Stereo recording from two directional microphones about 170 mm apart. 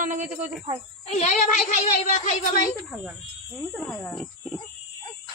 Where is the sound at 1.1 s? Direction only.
45° left (ahead or behind).